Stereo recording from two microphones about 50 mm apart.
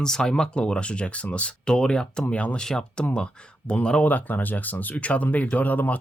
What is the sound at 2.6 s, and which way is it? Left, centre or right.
A man's voice, centre.